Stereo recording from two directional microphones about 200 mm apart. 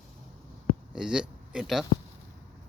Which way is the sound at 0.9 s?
5° right (ahead or behind).